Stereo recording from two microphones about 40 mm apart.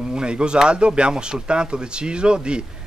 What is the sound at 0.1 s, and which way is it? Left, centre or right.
Speech, right.